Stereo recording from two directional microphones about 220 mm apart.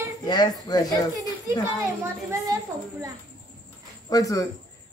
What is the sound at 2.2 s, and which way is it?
Speech, 15° right (ahead or behind).